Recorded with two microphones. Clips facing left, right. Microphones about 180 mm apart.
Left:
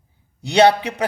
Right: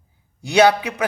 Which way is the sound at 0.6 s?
30° left (ahead or behind).